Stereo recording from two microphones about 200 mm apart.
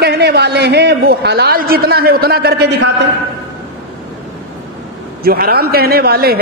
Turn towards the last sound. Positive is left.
turn(degrees=-50)  # may be behind; listen again after turning